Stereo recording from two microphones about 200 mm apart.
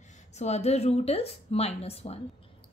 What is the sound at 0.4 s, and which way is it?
A woman's voice, 35° left (ahead or behind).